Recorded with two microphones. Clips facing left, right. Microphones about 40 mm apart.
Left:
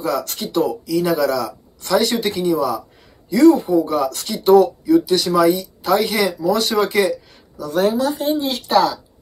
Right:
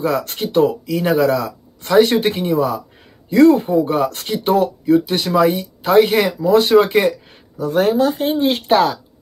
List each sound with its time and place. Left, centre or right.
0.0 s speech: right